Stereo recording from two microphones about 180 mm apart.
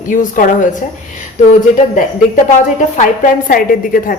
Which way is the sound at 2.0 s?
45° left (ahead or behind).